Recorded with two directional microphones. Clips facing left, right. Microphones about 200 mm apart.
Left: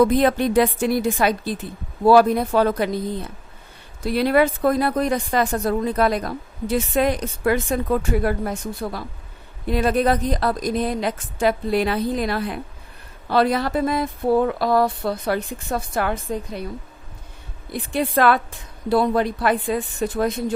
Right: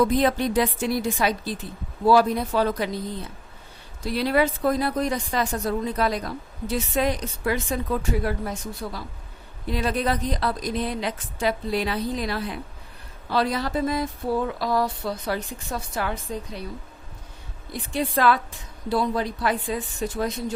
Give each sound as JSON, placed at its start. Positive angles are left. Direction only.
{"t": 0.0, "sound": "a woman's voice", "side_deg": 55}
{"t": 17.7, "sound": "speech", "side_deg": 60}